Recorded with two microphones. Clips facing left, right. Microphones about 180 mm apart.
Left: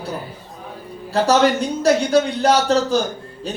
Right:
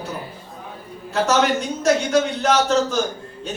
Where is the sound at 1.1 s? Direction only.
35° left (ahead or behind).